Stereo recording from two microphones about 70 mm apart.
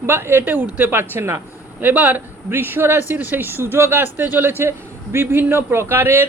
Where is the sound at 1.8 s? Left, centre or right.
Right.